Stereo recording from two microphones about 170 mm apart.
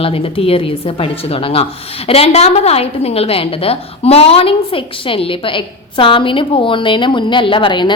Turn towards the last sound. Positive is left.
turn(degrees=30)  # may be behind; listen again after turning